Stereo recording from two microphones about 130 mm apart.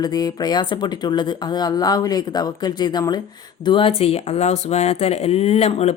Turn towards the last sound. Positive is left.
turn(degrees=55)  # may be behind; listen again after turning